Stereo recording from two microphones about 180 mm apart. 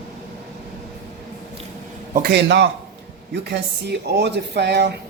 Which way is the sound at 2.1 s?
65° right (ahead or behind).